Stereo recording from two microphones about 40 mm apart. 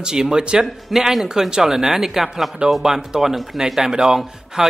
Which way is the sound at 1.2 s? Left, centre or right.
Centre.